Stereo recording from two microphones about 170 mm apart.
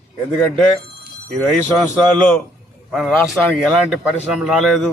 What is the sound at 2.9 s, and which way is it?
A man's voice, centre (ahead or behind).